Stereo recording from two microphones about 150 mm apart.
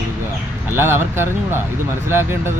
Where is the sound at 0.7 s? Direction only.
15° right (ahead or behind).